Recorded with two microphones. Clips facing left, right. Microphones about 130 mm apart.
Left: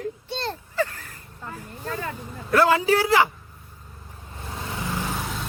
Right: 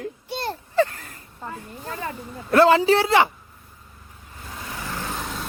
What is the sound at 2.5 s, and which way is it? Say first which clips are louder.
Speech: right 3 dB; 25° right (ahead or behind).